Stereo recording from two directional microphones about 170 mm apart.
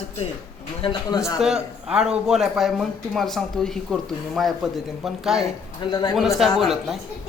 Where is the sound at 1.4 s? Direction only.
5° right (ahead or behind).